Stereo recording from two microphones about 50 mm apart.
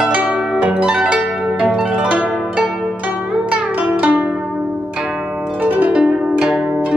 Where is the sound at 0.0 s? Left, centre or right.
Right.